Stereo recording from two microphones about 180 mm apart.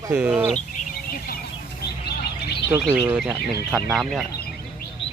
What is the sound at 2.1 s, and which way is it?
Chirp, 65° left (ahead or behind).